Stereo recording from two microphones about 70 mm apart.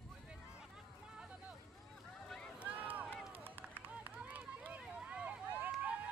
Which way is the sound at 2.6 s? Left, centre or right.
Right.